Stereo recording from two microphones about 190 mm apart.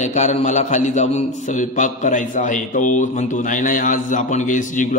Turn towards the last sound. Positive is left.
turn(degrees=40)  # may be behind; listen again after turning